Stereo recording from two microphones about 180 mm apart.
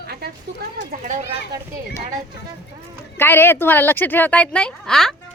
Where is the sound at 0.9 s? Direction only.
45° right (ahead or behind).